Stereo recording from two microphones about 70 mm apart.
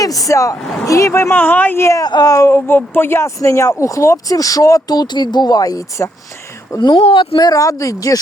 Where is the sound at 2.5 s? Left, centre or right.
Left.